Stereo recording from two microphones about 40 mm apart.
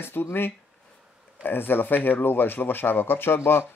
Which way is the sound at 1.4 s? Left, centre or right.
Left.